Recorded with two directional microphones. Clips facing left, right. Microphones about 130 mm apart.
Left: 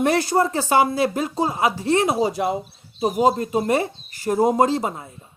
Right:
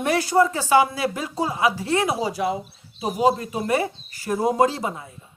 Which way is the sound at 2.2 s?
50° left (ahead or behind).